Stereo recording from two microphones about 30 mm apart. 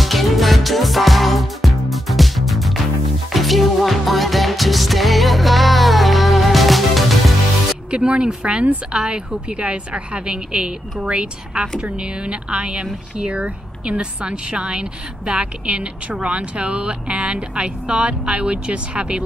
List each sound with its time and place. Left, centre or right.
0.0 s music: centre
7.9 s a woman's voice: right
10.5 s speech: centre
11.1 s a woman's voice: right